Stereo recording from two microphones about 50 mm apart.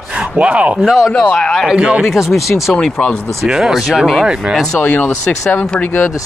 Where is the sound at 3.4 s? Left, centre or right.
Centre.